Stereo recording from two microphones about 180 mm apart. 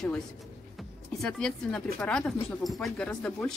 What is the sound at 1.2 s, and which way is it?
A woman's voice, 5° left (ahead or behind).